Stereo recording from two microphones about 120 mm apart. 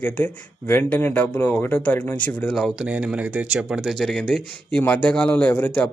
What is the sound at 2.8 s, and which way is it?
Speech, 10° right (ahead or behind).